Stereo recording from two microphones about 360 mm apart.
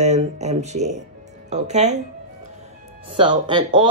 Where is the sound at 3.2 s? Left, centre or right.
Centre.